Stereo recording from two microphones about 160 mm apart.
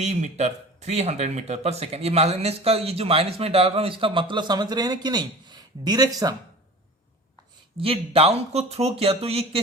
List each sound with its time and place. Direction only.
0.0 s speech: 45° right (ahead or behind); by 6.3 s 25° right (ahead or behind)
7.8 s speech: 35° right (ahead or behind)